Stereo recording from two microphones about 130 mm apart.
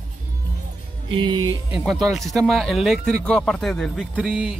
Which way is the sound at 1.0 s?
40° right (ahead or behind).